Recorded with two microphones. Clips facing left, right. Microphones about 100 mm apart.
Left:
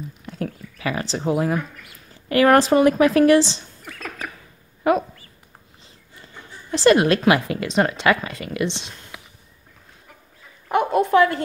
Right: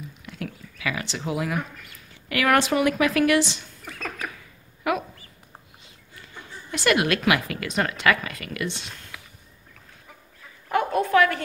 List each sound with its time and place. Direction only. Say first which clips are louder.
0.2 s speech: left 6 dB; 35° left (ahead or behind)
4.9 s speech: left 7 dB; 30° left (ahead or behind)
6.2 s speech: even; 30° left (ahead or behind)
10.7 s a sound: left 4 dB; 25° left (ahead or behind)